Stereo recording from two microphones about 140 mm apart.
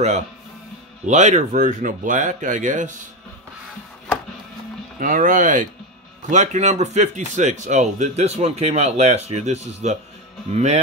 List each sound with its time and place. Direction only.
1.0 s speech: 60° right (ahead or behind)
4.9 s speech: 70° right (ahead or behind); by 10.8 s 50° right (ahead or behind)